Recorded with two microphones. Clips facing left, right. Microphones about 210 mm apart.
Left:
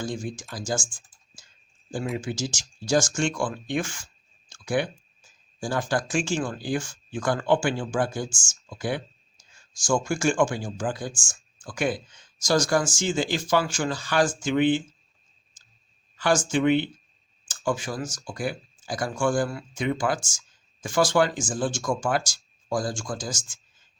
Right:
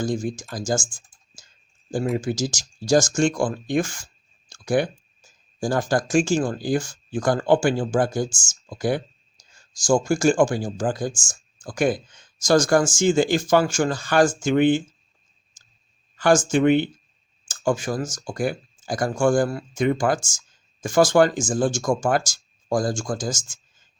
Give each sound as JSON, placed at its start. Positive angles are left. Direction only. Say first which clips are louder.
{"t": 0.0, "sound": "speech", "louder": "right 6 dB", "side_deg": -40}
{"t": 16.1, "sound": "speech", "louder": "right 5 dB", "side_deg": -45}